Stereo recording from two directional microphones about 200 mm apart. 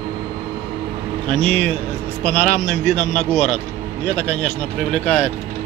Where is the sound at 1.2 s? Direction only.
5° left (ahead or behind).